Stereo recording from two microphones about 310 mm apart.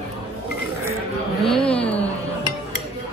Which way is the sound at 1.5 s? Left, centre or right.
Centre.